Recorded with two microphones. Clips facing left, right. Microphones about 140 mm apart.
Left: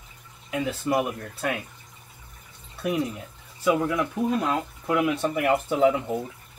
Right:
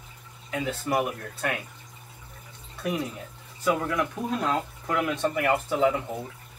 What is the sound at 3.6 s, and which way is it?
Speech, 5° left (ahead or behind).